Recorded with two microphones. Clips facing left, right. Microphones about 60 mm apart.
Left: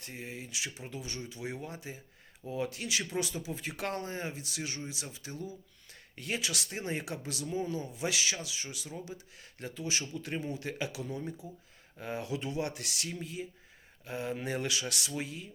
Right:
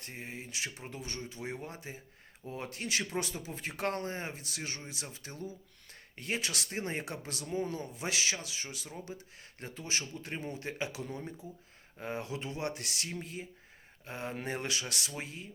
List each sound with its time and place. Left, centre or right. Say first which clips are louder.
0.0 s speech: left 1 dB; right